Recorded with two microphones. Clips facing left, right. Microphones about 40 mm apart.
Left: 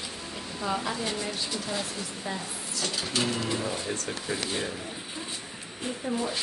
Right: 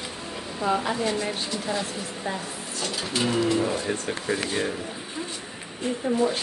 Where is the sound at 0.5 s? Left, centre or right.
Right.